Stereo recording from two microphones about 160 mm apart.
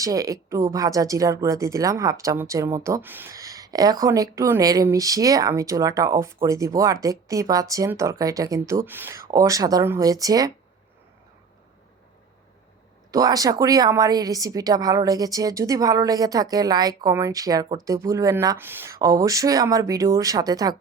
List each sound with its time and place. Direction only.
0.0 s speech: 20° right (ahead or behind)
13.1 s speech: 20° right (ahead or behind)